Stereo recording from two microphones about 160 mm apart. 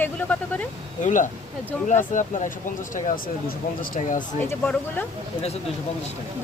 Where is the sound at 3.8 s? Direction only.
60° left (ahead or behind).